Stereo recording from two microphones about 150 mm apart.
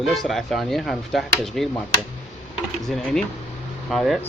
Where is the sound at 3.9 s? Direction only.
Centre (ahead or behind).